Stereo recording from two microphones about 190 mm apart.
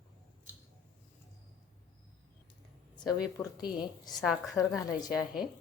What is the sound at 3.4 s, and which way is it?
Speech, 20° left (ahead or behind).